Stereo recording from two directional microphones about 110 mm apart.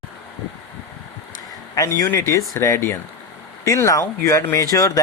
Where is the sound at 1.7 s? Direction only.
30° left (ahead or behind).